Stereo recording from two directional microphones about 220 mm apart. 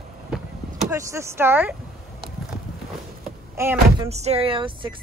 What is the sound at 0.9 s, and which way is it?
Speech, 15° right (ahead or behind).